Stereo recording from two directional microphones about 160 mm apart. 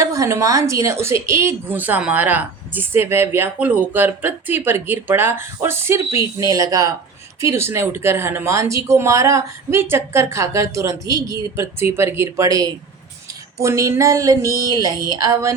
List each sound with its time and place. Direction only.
0.0 s a woman's voice: 20° right (ahead or behind)